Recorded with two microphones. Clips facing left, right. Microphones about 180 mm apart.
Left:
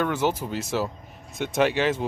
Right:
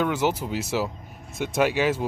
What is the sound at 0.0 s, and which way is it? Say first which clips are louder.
Speech: right 1 dB; 10° right (ahead or behind).